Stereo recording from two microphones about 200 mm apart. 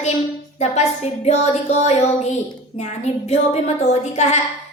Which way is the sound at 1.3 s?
35° left (ahead or behind).